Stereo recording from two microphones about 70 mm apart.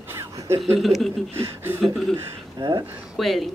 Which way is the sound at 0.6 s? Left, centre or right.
Centre.